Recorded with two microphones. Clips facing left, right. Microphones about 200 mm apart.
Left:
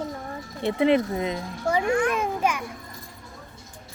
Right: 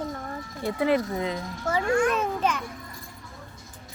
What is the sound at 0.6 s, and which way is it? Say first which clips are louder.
A child's voice: left 3 dB; 25° left (ahead or behind).